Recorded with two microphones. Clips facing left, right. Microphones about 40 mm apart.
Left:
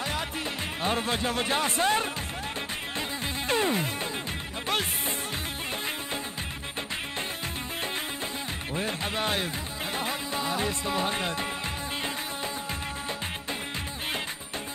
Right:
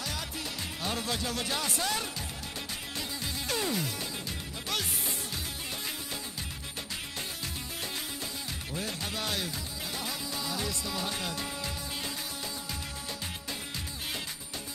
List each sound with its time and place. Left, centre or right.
0.8 s music: left
8.7 s music: left